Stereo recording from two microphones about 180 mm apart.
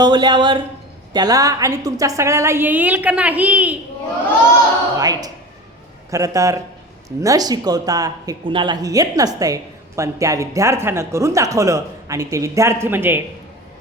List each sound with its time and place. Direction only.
0.0 s speech: 25° right (ahead or behind); by 3.8 s 10° right (ahead or behind)
4.9 s speech: 20° right (ahead or behind)